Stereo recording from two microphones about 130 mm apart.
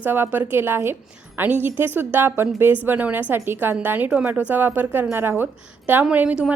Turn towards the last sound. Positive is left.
turn(degrees=-10)  # may be behind; listen again after turning